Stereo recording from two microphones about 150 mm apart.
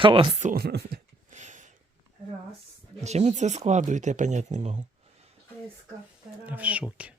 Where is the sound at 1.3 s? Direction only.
55° right (ahead or behind).